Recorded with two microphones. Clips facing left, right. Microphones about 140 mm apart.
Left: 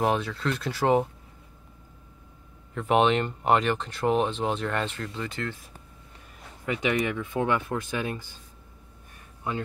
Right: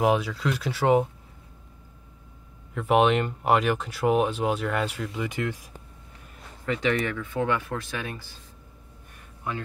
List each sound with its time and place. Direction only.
0.0 s speech: 5° right (ahead or behind)
2.7 s speech: 5° right (ahead or behind)
6.6 s speech: 10° left (ahead or behind)